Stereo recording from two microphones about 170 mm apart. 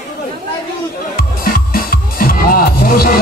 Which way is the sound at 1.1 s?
55° left (ahead or behind).